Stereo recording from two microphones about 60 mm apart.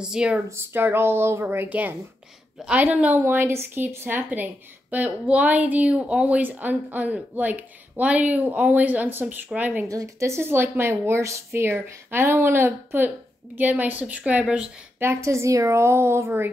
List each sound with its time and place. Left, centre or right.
0.0 s speech: centre
0.5 s speech: right
1.7 s a woman's voice: right
3.2 s speech: right
4.9 s a woman's voice: right
9.8 s speech: right
11.6 s speech: right
13.6 s a woman's voice: right
15.2 s speech: right